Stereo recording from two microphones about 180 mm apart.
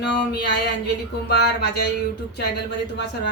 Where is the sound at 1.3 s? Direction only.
65° left (ahead or behind).